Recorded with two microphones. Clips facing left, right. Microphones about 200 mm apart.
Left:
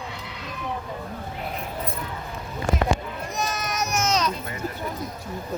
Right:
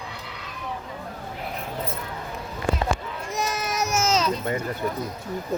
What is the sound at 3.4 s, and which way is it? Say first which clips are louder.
Baby cry: right 2 dB; 30° right (ahead or behind).